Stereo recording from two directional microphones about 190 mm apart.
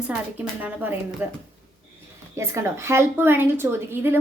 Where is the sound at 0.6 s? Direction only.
10° right (ahead or behind).